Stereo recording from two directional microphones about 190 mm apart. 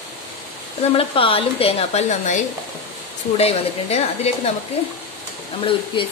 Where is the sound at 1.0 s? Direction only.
30° left (ahead or behind).